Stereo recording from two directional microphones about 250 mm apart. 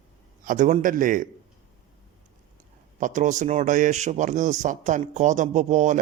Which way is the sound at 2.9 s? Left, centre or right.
Right.